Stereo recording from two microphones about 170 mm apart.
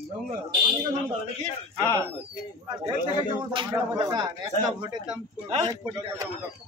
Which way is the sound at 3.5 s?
25° right (ahead or behind).